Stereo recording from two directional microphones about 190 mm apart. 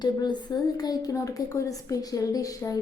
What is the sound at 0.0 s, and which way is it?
A woman's voice, 20° left (ahead or behind).